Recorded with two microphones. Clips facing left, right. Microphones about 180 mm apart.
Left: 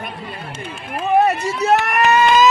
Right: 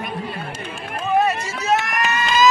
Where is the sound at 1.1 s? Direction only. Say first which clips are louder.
Left 4 dB; 60° left (ahead or behind).